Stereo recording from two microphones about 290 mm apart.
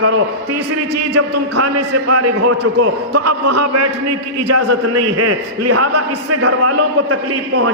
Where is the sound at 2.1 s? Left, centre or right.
Right.